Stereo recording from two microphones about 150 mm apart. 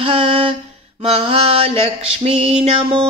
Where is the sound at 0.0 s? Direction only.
35° right (ahead or behind).